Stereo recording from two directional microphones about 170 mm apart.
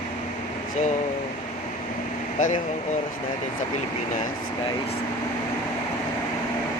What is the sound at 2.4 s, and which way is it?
Speech, 50° left (ahead or behind).